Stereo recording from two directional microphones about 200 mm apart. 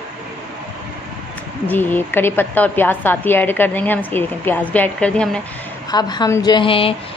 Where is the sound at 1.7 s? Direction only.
10° left (ahead or behind).